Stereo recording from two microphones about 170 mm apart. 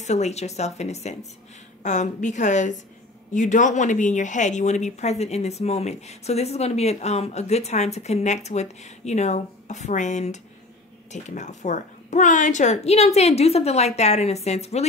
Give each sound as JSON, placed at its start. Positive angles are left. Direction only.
{"t": 0.0, "sound": "a woman's voice", "side_deg": 40}